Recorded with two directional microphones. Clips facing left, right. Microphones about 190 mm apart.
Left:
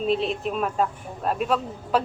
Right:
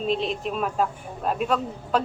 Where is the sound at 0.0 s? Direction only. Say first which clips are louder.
Left 2 dB; centre (ahead or behind).